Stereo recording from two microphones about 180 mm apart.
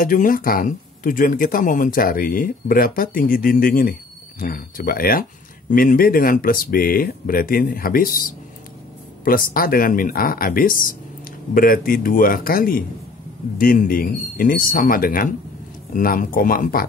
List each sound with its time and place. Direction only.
0.0 s speech: 50° left (ahead or behind)